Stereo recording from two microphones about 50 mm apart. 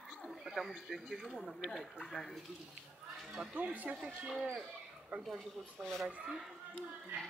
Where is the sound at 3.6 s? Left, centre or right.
Right.